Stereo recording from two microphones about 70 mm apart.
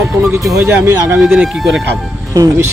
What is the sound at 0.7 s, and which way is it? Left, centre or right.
Speech, right.